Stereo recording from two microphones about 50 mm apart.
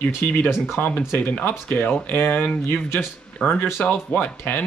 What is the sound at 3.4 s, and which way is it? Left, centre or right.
Speech, centre.